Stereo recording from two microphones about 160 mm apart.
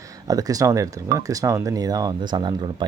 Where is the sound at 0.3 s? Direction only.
20° right (ahead or behind).